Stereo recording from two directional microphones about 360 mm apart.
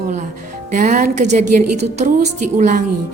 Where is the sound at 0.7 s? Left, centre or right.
Right.